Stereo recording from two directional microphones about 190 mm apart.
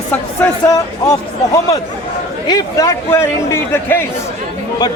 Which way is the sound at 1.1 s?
20° left (ahead or behind).